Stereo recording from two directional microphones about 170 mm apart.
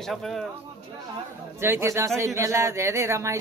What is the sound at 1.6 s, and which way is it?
Speech, 15° right (ahead or behind).